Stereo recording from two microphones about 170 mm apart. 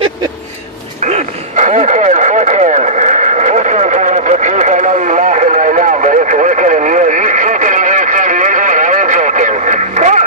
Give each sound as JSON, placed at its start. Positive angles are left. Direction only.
{"t": 1.0, "sound": "radio", "side_deg": -45}